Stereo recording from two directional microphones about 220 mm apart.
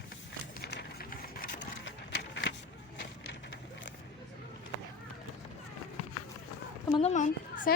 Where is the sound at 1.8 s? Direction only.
55° left (ahead or behind).